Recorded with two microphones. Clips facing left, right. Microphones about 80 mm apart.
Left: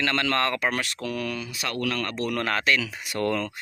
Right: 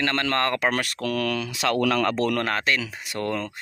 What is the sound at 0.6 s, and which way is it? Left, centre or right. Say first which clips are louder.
Speech: right 3 dB; right.